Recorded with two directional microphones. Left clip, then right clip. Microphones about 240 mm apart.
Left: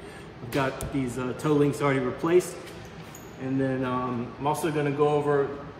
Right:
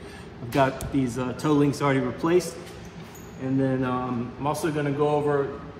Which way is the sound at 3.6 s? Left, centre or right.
Centre.